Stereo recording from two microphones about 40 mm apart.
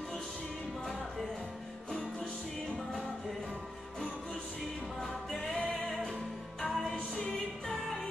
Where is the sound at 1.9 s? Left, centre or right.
Left.